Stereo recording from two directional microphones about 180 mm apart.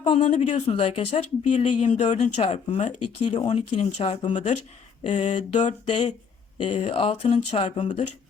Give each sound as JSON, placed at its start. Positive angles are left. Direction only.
{"t": 0.0, "sound": "speech", "side_deg": 35}